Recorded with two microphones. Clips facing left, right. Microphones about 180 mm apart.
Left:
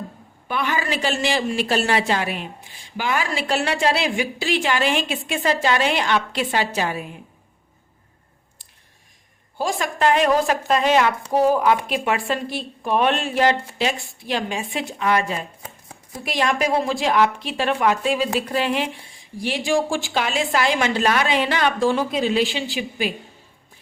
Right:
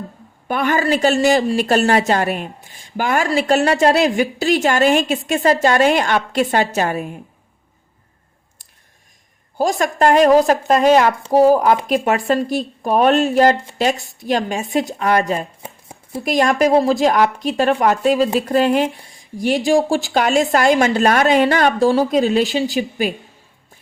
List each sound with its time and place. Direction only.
0.4 s speech: 50° right (ahead or behind)
9.6 s speech: 45° right (ahead or behind)
15.6 s chopping: 25° right (ahead or behind)
16.2 s speech: 45° right (ahead or behind)